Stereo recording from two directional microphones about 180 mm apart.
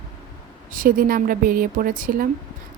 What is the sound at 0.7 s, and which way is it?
A woman's voice, 50° right (ahead or behind).